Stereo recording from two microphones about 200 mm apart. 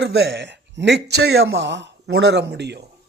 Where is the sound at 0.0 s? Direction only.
55° right (ahead or behind).